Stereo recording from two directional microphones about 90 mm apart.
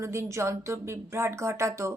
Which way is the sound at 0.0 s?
30° right (ahead or behind).